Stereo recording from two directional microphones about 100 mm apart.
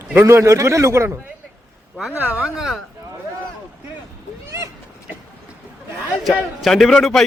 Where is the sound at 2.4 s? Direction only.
5° right (ahead or behind).